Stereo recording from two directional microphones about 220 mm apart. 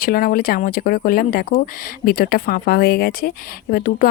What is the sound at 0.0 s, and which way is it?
Speech, 40° left (ahead or behind).